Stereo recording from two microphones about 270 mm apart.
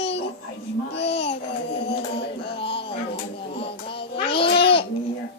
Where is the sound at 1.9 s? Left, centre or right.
Centre.